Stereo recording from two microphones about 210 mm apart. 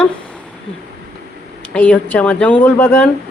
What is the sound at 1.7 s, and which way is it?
A woman's voice, 5° left (ahead or behind).